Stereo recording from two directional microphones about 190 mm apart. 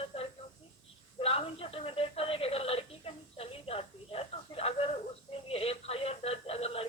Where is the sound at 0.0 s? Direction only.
30° left (ahead or behind).